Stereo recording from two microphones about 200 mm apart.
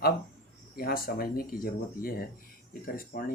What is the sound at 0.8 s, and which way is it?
Speech, 45° left (ahead or behind).